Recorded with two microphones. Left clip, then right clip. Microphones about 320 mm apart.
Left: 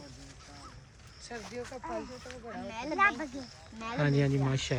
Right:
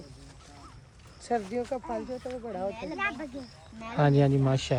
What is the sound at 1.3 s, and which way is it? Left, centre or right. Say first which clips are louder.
Speech: right 14 dB; centre.